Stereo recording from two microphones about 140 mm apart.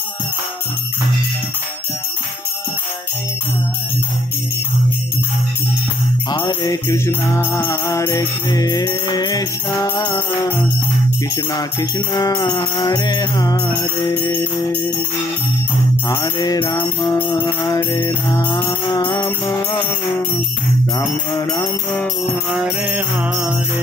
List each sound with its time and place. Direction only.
6.3 s music: 30° left (ahead or behind)
9.8 s jingle bell: 20° left (ahead or behind)
11.5 s music: 25° left (ahead or behind)
14.1 s jingle bell: 10° left (ahead or behind)
16.1 s music: 25° left (ahead or behind)
16.7 s music: 20° left (ahead or behind)
18.5 s jingle bell: 15° left (ahead or behind)
22.5 s jingle bell: 10° right (ahead or behind)